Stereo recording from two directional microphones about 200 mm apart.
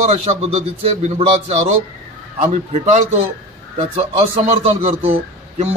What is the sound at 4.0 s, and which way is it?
A man's voice, 30° right (ahead or behind).